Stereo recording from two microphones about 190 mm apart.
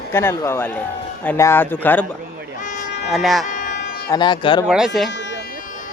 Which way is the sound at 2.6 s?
40° left (ahead or behind).